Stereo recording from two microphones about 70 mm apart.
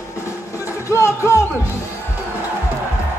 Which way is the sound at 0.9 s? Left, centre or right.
Left.